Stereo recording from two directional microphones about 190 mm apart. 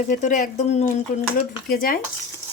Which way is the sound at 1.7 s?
50° left (ahead or behind).